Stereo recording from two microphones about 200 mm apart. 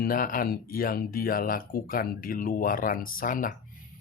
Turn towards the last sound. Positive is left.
turn(degrees=40)  # may be behind; listen again after turning